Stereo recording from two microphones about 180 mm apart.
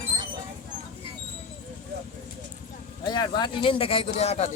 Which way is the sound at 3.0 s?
25° left (ahead or behind).